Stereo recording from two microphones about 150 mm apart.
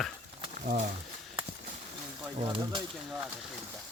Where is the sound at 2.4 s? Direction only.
35° right (ahead or behind).